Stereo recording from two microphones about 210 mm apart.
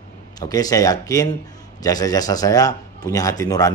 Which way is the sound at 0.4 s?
20° left (ahead or behind).